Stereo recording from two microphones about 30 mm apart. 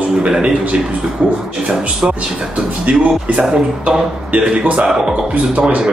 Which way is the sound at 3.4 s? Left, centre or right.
Centre.